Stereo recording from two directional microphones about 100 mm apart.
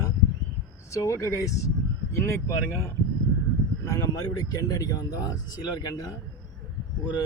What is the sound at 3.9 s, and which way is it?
Speech, 35° left (ahead or behind).